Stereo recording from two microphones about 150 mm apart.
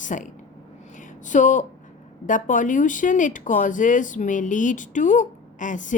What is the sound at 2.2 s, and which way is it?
Speech, 60° left (ahead or behind).